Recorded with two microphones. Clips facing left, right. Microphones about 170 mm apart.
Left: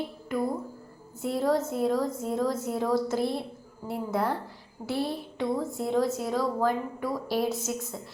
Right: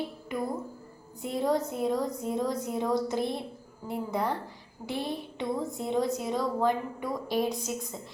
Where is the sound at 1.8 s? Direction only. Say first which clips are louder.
Left 3 dB; 20° right (ahead or behind).